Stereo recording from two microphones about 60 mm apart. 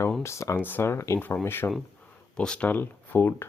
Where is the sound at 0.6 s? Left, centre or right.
Left.